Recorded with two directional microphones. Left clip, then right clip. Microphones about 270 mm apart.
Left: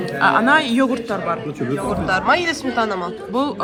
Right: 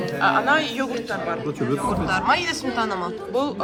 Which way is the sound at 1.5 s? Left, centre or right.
Centre.